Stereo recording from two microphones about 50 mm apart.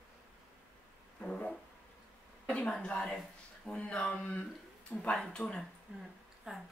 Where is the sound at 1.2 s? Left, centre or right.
Centre.